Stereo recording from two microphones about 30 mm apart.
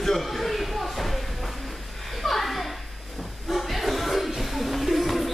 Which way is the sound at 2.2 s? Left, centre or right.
Centre.